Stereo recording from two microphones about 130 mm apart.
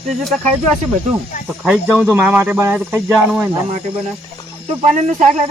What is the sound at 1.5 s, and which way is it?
Speech, 5° right (ahead or behind).